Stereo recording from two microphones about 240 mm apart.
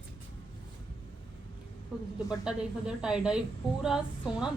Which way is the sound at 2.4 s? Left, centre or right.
Centre.